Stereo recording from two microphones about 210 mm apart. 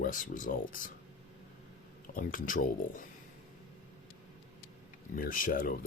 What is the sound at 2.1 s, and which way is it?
Speech, 40° left (ahead or behind).